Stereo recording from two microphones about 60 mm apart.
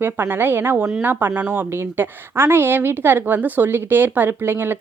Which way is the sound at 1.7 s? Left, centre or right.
Right.